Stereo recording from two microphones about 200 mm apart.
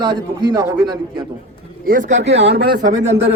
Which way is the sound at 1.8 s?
45° right (ahead or behind).